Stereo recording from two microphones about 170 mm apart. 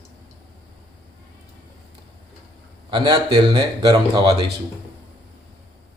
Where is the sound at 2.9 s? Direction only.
30° right (ahead or behind).